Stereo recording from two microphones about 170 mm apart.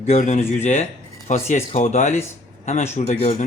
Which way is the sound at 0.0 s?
45° left (ahead or behind).